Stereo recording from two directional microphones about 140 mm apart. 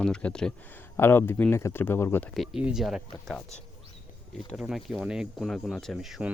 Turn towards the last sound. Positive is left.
turn(degrees=0)  # may be behind; listen again after turning